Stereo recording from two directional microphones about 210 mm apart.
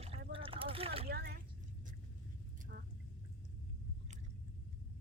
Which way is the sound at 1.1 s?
50° right (ahead or behind).